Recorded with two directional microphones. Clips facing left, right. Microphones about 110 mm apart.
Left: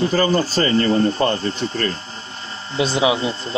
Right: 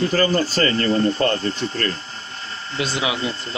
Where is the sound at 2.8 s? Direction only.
30° left (ahead or behind).